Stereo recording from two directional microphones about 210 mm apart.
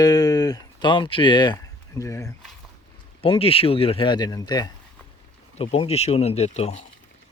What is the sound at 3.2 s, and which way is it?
Speech, 25° left (ahead or behind).